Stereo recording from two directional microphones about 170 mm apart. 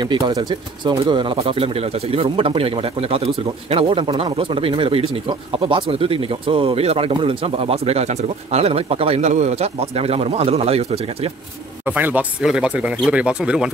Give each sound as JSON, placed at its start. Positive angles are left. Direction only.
{"t": 0.0, "sound": "speech", "side_deg": -25}
{"t": 11.8, "sound": "speech", "side_deg": -10}